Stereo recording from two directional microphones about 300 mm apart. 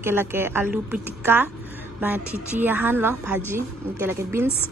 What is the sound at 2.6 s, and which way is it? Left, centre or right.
A woman's voice, centre.